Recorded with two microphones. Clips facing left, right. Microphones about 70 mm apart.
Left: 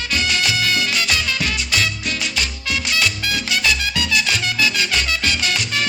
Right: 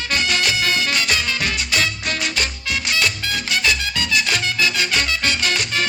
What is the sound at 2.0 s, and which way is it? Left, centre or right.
Music, right.